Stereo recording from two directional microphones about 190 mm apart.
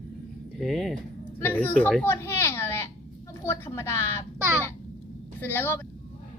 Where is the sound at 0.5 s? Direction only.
Centre (ahead or behind).